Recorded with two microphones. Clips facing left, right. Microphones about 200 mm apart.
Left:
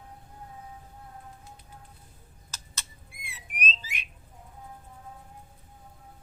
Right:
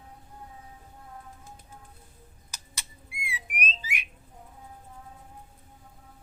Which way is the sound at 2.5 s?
15° right (ahead or behind).